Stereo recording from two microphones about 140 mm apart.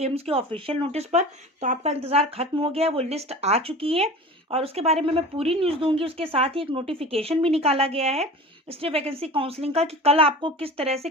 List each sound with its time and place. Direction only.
0.0 s speech: 45° right (ahead or behind)